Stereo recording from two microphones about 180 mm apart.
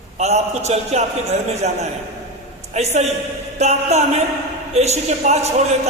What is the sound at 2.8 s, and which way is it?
A man's voice, 35° right (ahead or behind).